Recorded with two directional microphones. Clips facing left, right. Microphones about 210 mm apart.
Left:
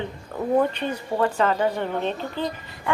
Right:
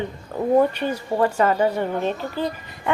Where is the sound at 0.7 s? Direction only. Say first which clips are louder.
Right 3 dB; 10° right (ahead or behind).